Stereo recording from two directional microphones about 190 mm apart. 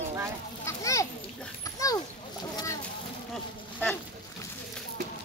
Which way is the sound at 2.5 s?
15° left (ahead or behind).